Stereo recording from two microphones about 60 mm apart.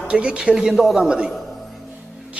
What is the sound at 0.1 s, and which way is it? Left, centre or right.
Speech, centre.